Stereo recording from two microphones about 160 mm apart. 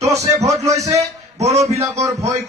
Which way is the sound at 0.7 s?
20° right (ahead or behind).